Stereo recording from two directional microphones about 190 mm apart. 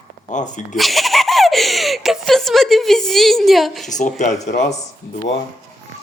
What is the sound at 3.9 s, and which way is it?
Speech, 40° left (ahead or behind).